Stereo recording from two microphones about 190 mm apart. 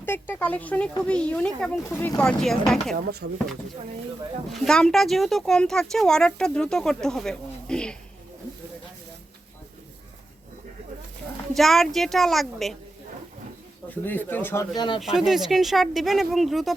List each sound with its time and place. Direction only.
0.0 s speech: 10° left (ahead or behind)
2.9 s speech: 60° right (ahead or behind)
4.5 s speech: centre (ahead or behind)
11.5 s speech: centre (ahead or behind)
13.9 s speech: 10° left (ahead or behind)
15.0 s speech: centre (ahead or behind)